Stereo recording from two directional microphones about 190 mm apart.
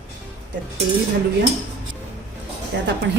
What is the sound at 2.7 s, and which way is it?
Speech, 65° right (ahead or behind).